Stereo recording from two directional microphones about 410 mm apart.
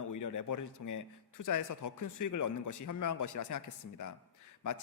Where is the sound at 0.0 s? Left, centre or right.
Left.